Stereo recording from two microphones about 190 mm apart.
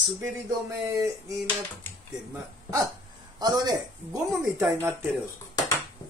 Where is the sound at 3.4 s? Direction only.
20° right (ahead or behind).